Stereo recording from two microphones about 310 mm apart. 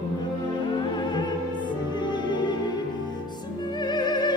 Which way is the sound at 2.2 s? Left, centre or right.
Centre.